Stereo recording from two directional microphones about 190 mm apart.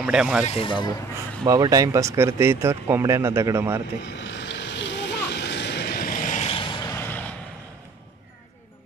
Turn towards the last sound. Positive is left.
turn(degrees=10)  # may be behind; listen again after turning